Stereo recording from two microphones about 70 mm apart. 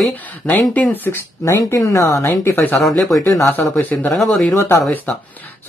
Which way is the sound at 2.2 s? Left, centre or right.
Left.